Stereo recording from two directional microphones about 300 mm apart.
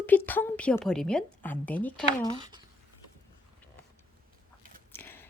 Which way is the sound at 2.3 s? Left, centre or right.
Centre.